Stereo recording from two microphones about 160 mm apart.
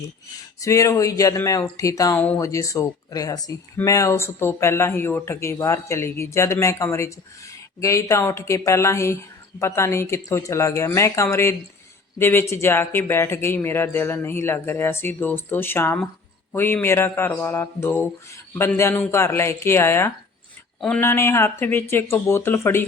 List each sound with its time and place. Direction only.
0.6 s speech: 20° left (ahead or behind)
2.1 s speech: 10° left (ahead or behind)
2.4 s a man's voice: 20° left (ahead or behind)